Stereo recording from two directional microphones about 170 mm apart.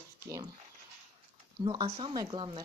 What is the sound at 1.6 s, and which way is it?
Speech, 30° right (ahead or behind).